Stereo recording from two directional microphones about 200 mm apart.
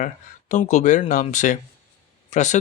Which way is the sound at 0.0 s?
40° left (ahead or behind).